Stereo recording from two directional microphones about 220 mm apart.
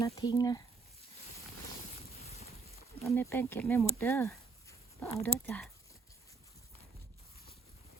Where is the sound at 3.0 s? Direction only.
10° left (ahead or behind).